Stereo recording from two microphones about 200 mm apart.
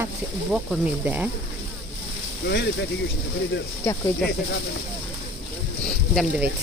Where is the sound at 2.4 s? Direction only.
60° left (ahead or behind).